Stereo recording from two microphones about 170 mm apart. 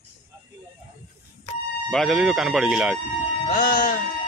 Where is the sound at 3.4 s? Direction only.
55° left (ahead or behind).